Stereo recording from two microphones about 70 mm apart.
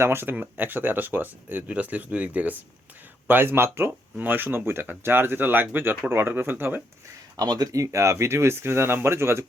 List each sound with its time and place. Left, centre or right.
0.0 s speech: right
7.3 s speech: right
7.7 s speech: right